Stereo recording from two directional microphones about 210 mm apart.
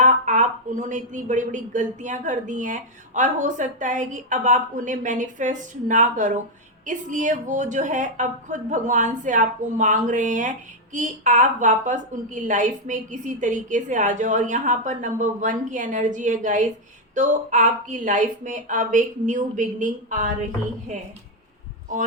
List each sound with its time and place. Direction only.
0.0 s speech: 35° right (ahead or behind)